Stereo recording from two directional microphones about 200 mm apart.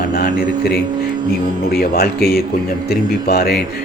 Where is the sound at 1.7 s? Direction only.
50° left (ahead or behind).